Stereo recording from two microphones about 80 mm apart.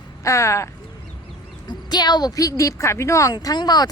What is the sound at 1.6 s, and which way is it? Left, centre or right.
A woman's voice, left.